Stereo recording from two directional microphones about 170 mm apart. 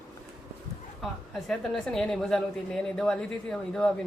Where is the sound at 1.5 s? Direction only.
5° left (ahead or behind).